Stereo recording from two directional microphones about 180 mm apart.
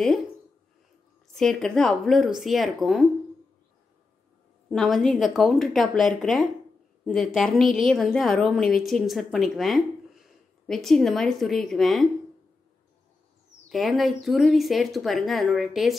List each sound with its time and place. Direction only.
1.3 s a woman's voice: 5° left (ahead or behind)
4.6 s a woman's voice: centre (ahead or behind)
13.7 s a woman's voice: centre (ahead or behind)